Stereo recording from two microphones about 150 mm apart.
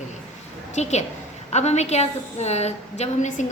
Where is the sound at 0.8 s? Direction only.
50° left (ahead or behind).